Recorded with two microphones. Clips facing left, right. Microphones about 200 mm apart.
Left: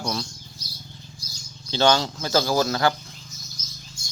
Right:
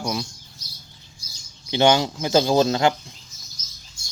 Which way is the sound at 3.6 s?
50° left (ahead or behind).